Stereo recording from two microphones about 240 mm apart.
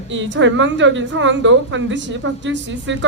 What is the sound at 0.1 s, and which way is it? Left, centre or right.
A woman's voice, right.